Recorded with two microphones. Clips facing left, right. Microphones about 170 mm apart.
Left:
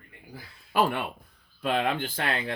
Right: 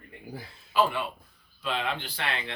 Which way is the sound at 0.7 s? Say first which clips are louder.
Left 1 dB; 55° left (ahead or behind).